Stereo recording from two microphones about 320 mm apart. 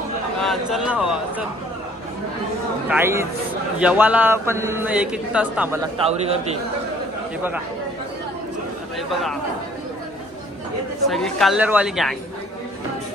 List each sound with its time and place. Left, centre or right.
0.4 s speech: centre
2.9 s a man's voice: centre
6.0 s a man's voice: centre
8.9 s speech: centre
11.1 s a man's voice: centre